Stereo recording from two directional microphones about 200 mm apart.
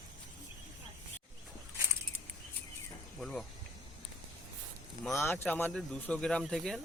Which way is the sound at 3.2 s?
Centre (ahead or behind).